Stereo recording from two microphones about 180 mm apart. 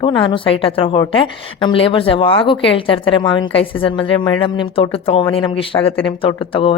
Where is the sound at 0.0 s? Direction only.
25° left (ahead or behind).